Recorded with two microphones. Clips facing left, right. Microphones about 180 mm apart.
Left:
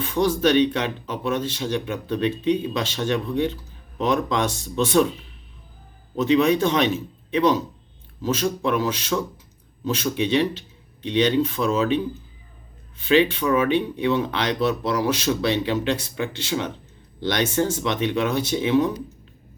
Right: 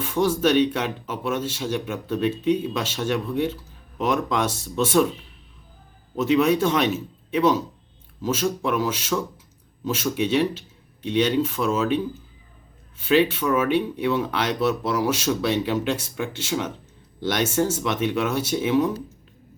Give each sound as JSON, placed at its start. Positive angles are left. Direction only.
{"t": 0.0, "sound": "speech", "side_deg": -10}
{"t": 6.1, "sound": "speech", "side_deg": -5}
{"t": 13.1, "sound": "speech", "side_deg": -5}